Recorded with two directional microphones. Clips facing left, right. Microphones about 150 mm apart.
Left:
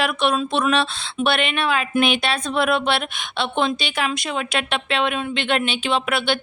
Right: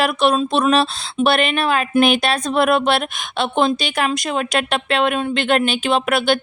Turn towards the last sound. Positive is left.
turn(degrees=-45)  # may be behind; listen again after turning